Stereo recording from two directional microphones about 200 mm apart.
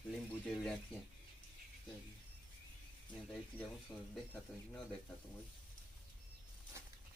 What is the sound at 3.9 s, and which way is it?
Speech, 20° left (ahead or behind).